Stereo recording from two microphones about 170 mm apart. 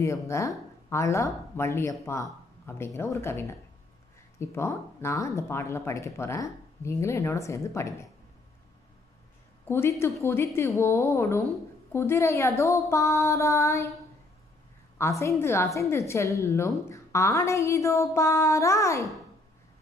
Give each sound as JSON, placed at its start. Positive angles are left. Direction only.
{"t": 0.0, "sound": "a woman's voice", "side_deg": 15}
{"t": 9.7, "sound": "a woman's voice", "side_deg": 15}
{"t": 15.0, "sound": "a woman's voice", "side_deg": 15}